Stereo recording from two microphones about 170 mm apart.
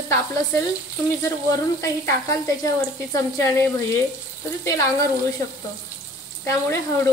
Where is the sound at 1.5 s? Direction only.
20° left (ahead or behind).